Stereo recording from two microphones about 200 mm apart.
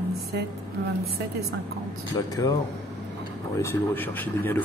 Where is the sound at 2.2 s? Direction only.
15° left (ahead or behind).